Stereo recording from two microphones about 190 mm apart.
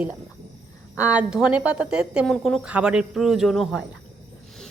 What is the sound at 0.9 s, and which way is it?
A woman's voice, 10° right (ahead or behind).